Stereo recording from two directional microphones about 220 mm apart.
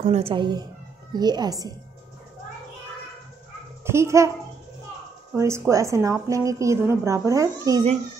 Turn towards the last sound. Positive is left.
turn(degrees=-15)  # may be behind; listen again after turning